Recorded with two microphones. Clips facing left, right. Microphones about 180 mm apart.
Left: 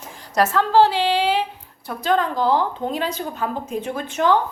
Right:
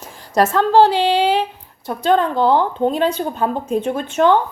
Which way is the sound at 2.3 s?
60° right (ahead or behind).